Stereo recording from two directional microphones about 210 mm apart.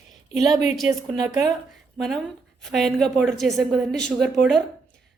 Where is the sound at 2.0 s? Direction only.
Centre (ahead or behind).